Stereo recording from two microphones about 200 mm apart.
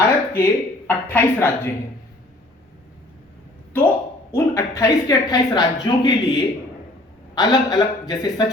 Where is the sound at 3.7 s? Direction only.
10° left (ahead or behind).